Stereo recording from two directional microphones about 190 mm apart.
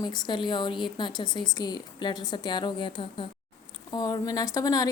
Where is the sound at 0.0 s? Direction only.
20° left (ahead or behind).